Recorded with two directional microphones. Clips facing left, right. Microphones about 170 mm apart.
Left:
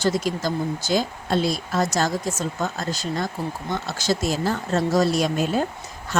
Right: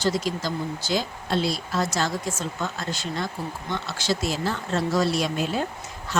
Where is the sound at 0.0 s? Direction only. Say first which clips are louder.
Left 2 dB; 50° left (ahead or behind).